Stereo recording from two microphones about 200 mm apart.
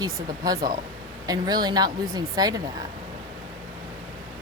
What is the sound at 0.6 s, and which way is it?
Speech, 45° right (ahead or behind).